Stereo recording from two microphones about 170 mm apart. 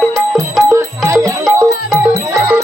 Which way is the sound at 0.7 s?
20° right (ahead or behind).